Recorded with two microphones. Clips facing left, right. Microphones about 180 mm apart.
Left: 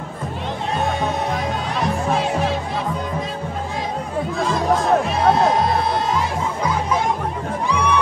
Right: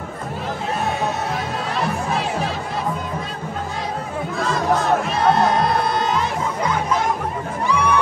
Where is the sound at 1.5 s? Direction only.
Centre (ahead or behind).